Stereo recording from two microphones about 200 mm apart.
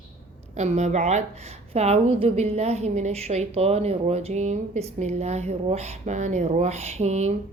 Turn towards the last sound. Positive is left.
turn(degrees=-35)  # may be behind; listen again after turning